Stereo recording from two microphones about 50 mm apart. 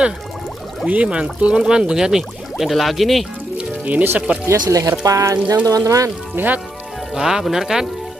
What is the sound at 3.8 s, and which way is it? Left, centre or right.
Speech, right.